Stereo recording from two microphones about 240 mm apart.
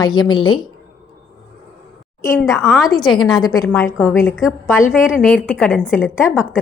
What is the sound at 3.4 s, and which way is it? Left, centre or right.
A woman's voice, centre.